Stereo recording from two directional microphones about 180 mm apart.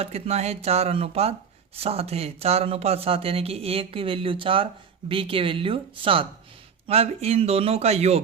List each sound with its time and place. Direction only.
0.0 s speech: 35° right (ahead or behind)